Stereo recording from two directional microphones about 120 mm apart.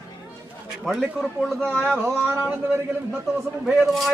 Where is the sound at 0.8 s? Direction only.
Centre (ahead or behind).